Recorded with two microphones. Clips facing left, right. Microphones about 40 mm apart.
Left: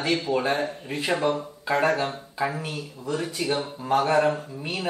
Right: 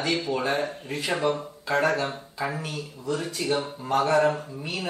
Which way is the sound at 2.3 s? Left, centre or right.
Centre.